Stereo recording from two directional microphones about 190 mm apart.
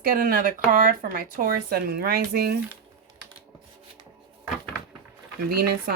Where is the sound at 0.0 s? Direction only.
50° right (ahead or behind).